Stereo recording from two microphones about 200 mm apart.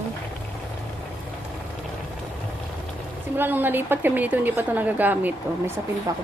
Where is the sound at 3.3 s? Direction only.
10° right (ahead or behind).